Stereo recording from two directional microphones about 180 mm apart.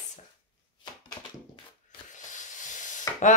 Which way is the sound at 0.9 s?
25° left (ahead or behind).